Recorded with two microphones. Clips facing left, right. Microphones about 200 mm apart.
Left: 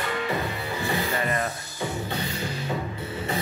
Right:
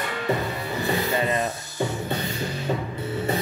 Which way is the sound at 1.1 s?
20° right (ahead or behind).